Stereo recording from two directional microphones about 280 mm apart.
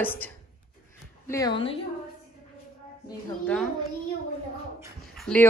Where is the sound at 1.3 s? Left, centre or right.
Centre.